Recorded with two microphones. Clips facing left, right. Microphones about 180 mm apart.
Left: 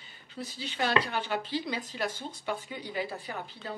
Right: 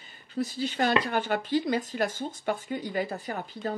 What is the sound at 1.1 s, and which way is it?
Speech, 45° right (ahead or behind).